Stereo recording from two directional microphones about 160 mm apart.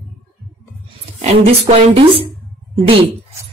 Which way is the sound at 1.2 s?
45° right (ahead or behind).